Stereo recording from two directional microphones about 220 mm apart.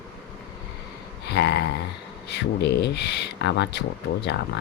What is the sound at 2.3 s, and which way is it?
Speech, 50° left (ahead or behind).